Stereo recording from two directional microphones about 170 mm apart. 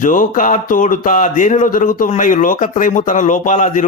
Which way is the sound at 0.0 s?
50° left (ahead or behind).